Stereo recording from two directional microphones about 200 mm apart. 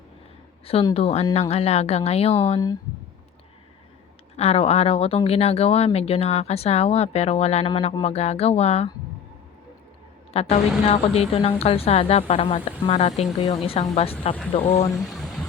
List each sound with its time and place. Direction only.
0.6 s speech: 30° left (ahead or behind)
4.4 s speech: 30° left (ahead or behind)
10.3 s a woman's voice: 30° left (ahead or behind)
15.1 s music: centre (ahead or behind)